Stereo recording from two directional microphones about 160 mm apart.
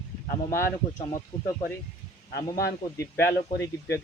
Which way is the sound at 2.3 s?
90° left.